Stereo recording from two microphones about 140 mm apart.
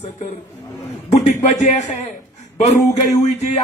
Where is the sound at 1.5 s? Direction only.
55° left (ahead or behind).